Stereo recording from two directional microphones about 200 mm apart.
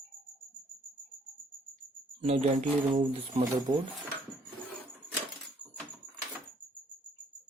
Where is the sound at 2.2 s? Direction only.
30° right (ahead or behind).